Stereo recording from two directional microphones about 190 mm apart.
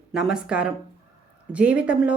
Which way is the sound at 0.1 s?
5° right (ahead or behind).